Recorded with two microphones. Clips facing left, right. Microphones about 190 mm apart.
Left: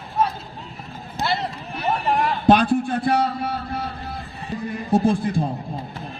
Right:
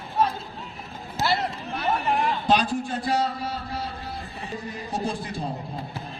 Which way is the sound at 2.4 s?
55° left (ahead or behind).